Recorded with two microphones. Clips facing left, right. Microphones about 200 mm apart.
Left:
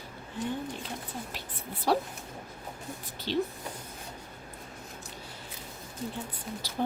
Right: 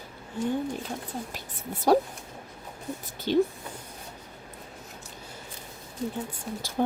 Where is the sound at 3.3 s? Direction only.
50° right (ahead or behind).